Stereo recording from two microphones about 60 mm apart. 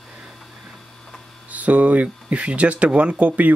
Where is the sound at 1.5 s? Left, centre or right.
Right.